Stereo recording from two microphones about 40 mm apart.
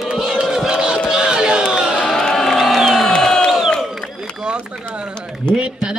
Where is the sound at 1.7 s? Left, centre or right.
Centre.